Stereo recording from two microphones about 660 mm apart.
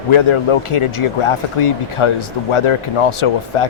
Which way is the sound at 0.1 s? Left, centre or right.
Left.